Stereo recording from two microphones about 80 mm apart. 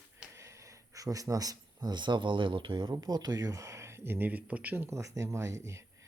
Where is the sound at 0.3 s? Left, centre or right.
Right.